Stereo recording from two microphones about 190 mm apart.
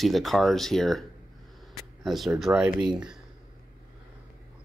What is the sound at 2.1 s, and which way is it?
Speech, centre (ahead or behind).